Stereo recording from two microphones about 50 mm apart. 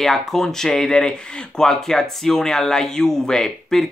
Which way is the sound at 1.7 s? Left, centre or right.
Centre.